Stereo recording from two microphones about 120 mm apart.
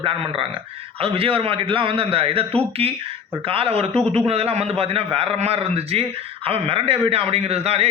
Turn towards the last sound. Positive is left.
turn(degrees=-60)  # may be behind; listen again after turning